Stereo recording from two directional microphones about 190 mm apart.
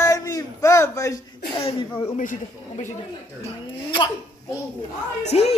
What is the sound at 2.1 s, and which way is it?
Speech, 40° left (ahead or behind).